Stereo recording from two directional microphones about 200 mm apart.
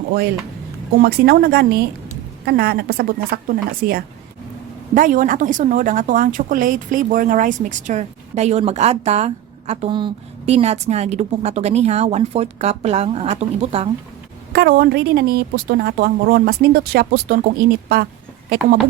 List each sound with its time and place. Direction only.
0.9 s speech: 50° right (ahead or behind); by 13.9 s 30° right (ahead or behind)
14.5 s speech: 50° right (ahead or behind)